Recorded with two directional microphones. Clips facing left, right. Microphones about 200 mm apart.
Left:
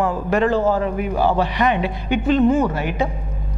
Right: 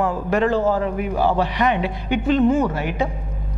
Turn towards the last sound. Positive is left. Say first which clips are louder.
# left 1 dB
turn(degrees=15)  # may be behind; listen again after turning